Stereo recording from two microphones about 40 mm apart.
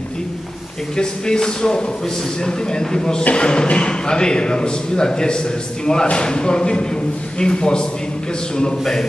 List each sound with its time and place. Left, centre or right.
0.9 s speech: centre